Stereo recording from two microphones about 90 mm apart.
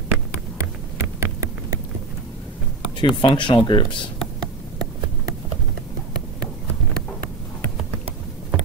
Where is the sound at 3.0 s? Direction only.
60° left (ahead or behind).